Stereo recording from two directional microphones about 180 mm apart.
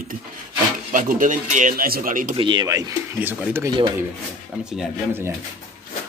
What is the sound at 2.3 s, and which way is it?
Speech, 25° right (ahead or behind).